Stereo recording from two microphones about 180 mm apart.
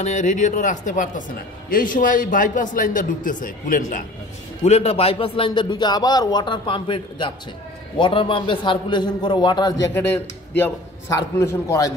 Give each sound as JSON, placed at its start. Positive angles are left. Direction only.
{"t": 0.0, "sound": "a man's voice", "side_deg": 40}
{"t": 4.6, "sound": "a man's voice", "side_deg": 35}